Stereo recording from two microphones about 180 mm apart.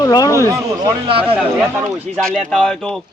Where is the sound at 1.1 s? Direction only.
30° right (ahead or behind).